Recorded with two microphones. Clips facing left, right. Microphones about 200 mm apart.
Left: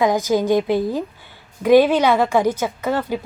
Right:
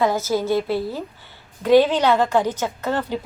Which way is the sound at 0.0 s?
15° left (ahead or behind).